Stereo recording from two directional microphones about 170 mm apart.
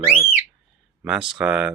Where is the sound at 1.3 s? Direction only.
5° right (ahead or behind).